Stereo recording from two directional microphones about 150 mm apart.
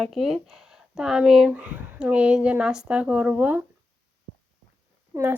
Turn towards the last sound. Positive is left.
turn(degrees=-20)  # may be behind; listen again after turning